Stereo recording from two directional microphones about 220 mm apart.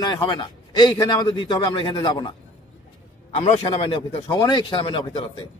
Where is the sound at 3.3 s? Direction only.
30° left (ahead or behind).